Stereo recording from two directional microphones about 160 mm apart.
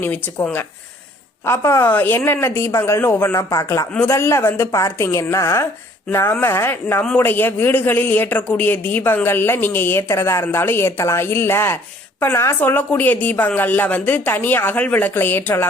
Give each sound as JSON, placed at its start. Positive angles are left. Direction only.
{"t": 0.0, "sound": "a man's voice", "side_deg": 10}